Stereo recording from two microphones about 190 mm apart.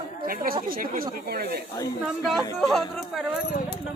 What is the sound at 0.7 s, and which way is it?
Speech, 50° right (ahead or behind).